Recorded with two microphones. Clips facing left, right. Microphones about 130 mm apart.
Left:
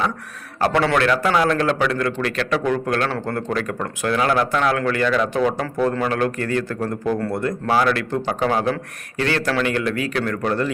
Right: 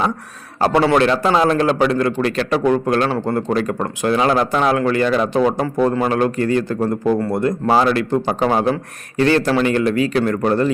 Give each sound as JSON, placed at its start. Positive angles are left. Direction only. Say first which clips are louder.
{"t": 0.6, "sound": "speech", "louder": "right 4 dB", "side_deg": -25}